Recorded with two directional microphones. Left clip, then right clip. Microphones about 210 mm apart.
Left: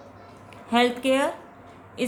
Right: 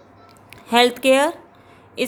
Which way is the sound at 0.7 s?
50° right (ahead or behind).